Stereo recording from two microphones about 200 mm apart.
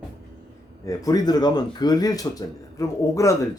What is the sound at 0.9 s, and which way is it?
A man's voice, 20° left (ahead or behind).